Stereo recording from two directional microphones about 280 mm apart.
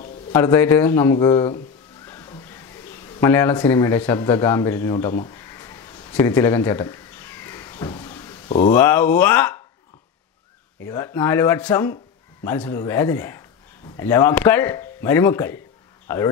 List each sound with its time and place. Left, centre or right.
0.3 s speech: centre
2.0 s music: centre
3.2 s speech: centre
10.9 s speech: centre